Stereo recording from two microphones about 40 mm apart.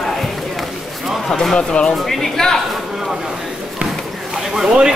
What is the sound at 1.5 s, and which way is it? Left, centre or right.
Speech, left.